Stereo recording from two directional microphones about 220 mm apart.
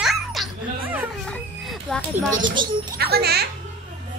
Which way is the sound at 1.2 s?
Centre (ahead or behind).